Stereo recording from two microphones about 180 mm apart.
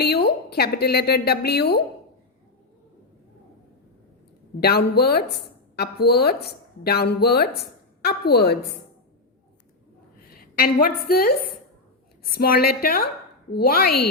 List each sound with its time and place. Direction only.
0.0 s a woman's voice: 60° left (ahead or behind)
4.6 s a woman's voice: 60° left (ahead or behind)
10.3 s a woman's voice: 55° left (ahead or behind)